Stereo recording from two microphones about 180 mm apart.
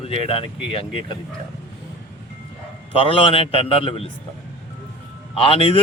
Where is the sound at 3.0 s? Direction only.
30° left (ahead or behind).